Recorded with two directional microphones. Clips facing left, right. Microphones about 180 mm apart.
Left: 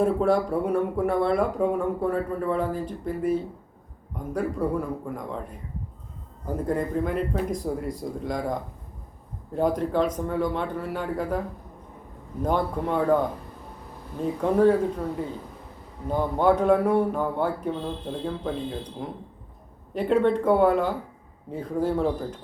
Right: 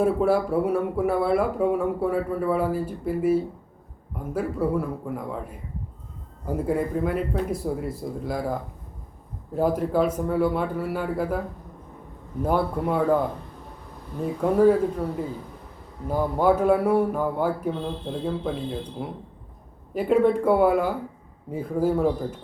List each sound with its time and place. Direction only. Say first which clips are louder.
0.0 s speech: right 1 dB; 5° right (ahead or behind)
9.6 s speech: right 1 dB; 5° right (ahead or behind)
12.4 s speech: right 1 dB; 10° right (ahead or behind)
14.4 s speech: right 1 dB; 5° right (ahead or behind)
16.0 s speech: right 1 dB; 10° right (ahead or behind)